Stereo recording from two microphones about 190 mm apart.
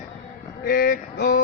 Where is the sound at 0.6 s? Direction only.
50° left (ahead or behind).